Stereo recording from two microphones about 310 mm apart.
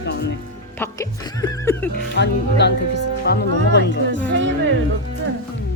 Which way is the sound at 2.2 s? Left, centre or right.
Left.